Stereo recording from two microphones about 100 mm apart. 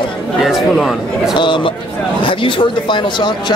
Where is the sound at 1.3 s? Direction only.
55° left (ahead or behind).